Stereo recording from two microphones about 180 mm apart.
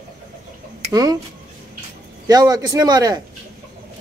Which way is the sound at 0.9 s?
20° right (ahead or behind).